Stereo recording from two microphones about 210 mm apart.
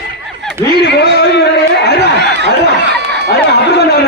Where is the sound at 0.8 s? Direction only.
55° left (ahead or behind).